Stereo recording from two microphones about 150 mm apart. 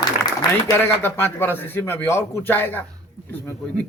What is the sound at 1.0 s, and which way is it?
Speech, 15° left (ahead or behind).